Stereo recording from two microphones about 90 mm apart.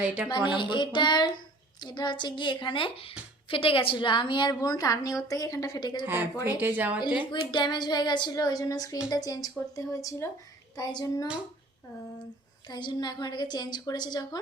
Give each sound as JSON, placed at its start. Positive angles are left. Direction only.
{"t": 0.0, "sound": "speech", "side_deg": -15}
{"t": 0.3, "sound": "a woman's voice", "side_deg": 60}
{"t": 6.6, "sound": "speech", "side_deg": -20}
{"t": 7.2, "sound": "a woman's voice", "side_deg": 60}
{"t": 12.6, "sound": "a woman's voice", "side_deg": 55}